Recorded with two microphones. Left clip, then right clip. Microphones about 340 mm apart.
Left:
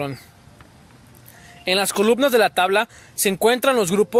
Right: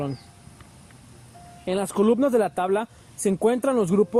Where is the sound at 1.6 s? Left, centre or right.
Left.